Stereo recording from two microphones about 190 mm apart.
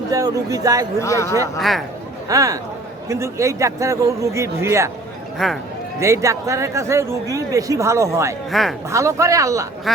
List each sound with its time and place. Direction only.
0.1 s speech: 20° right (ahead or behind)
0.9 s speech: 15° left (ahead or behind)
1.5 s speech: centre (ahead or behind)
2.3 s speech: 20° right (ahead or behind)
5.4 s speech: centre (ahead or behind)
6.0 s speech: 15° right (ahead or behind)